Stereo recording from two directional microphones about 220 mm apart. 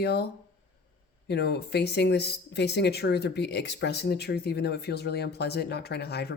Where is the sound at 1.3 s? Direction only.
50° left (ahead or behind).